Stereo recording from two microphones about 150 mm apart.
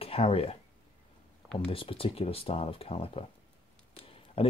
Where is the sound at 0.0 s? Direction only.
40° left (ahead or behind).